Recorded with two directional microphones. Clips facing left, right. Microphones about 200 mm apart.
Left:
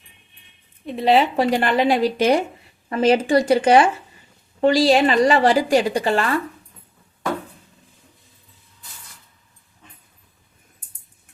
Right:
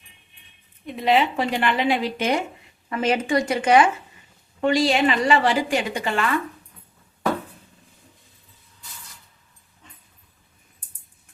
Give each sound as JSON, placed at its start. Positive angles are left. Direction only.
{"t": 0.9, "sound": "a woman's voice", "side_deg": 35}